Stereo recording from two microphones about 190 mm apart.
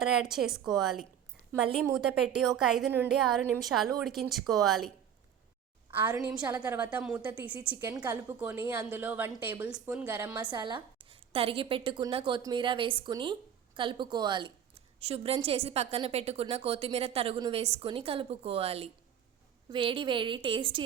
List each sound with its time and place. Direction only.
0.0 s a woman's voice: centre (ahead or behind)
5.9 s a woman's voice: 10° right (ahead or behind)
7.8 s a woman's voice: 20° right (ahead or behind)
10.5 s a woman's voice: 25° right (ahead or behind)